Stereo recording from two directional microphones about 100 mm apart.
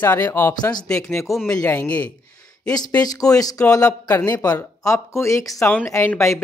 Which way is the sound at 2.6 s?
40° left (ahead or behind).